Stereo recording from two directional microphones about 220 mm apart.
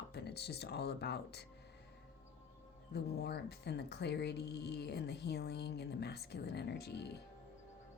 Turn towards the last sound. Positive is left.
turn(degrees=50)  # may be behind; listen again after turning